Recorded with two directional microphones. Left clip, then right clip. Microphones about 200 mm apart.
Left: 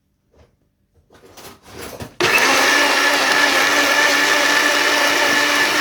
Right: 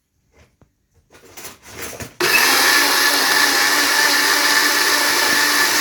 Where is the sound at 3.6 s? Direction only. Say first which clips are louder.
Left 1 dB; 20° left (ahead or behind).